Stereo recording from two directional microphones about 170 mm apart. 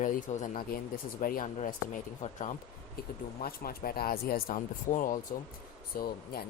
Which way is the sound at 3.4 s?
60° left (ahead or behind).